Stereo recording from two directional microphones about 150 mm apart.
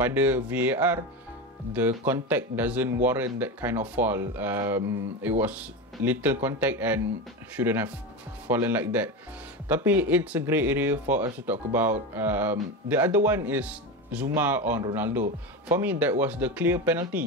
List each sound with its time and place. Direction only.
0.0 s speech: 10° right (ahead or behind)